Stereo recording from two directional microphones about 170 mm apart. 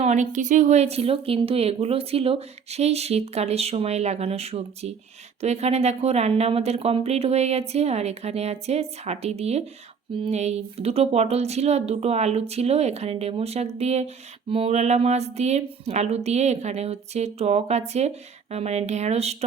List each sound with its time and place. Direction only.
0.0 s a woman's voice: 45° right (ahead or behind)